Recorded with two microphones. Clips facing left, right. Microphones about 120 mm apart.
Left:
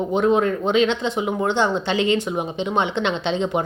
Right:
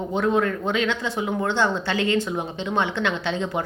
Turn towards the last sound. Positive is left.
turn(degrees=20)  # may be behind; listen again after turning